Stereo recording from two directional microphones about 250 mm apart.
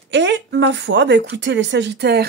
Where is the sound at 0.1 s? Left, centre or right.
Right.